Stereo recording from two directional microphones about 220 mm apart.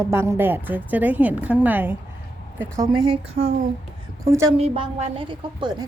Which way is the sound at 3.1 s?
25° right (ahead or behind).